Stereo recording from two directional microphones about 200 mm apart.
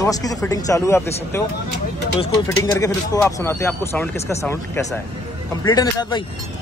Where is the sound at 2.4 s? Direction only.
15° left (ahead or behind).